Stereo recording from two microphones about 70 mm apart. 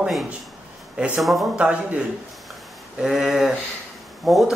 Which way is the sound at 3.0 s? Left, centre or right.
Centre.